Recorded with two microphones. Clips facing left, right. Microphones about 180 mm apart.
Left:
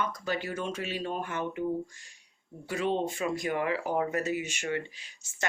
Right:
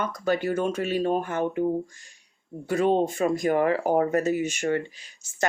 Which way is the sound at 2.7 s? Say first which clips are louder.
Right 7 dB; 45° right (ahead or behind).